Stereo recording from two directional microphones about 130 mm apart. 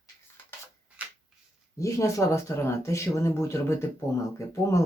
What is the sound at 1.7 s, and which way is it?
Speech, 25° left (ahead or behind).